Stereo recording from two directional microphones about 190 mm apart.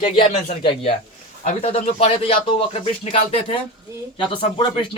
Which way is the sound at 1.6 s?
30° left (ahead or behind).